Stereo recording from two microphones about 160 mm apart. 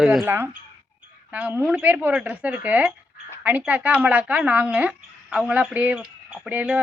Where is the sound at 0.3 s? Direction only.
15° right (ahead or behind).